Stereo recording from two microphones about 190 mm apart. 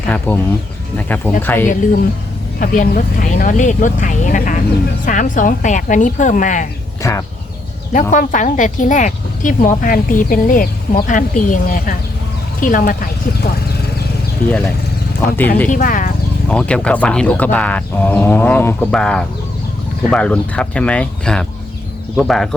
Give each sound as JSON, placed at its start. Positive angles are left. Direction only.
{"t": 0.3, "sound": "speech", "side_deg": 10}
{"t": 1.6, "sound": "speech", "side_deg": 40}
{"t": 7.0, "sound": "speech", "side_deg": 15}
{"t": 7.9, "sound": "speech", "side_deg": 45}
{"t": 15.4, "sound": "speech", "side_deg": 10}
{"t": 15.7, "sound": "speech", "side_deg": 45}
{"t": 16.5, "sound": "speech", "side_deg": 5}